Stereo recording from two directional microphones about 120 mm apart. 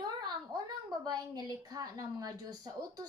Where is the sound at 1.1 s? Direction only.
35° right (ahead or behind).